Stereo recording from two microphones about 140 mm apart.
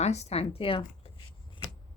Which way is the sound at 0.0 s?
50° left (ahead or behind).